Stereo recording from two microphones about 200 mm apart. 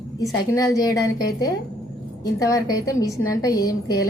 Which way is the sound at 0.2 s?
15° left (ahead or behind).